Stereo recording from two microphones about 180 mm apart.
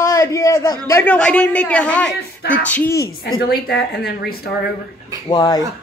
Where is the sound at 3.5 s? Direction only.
60° left (ahead or behind).